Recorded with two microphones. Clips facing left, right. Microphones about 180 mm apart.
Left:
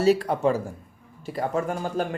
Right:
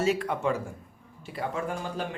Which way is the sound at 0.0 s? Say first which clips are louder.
Left 6 dB; 35° left (ahead or behind).